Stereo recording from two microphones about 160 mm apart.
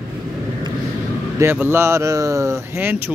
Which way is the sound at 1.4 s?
15° right (ahead or behind).